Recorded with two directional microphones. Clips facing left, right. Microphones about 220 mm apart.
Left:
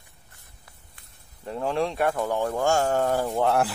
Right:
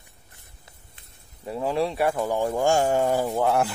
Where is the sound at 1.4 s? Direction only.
10° right (ahead or behind).